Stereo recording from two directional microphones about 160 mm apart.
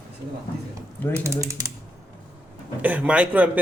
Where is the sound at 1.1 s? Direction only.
15° right (ahead or behind).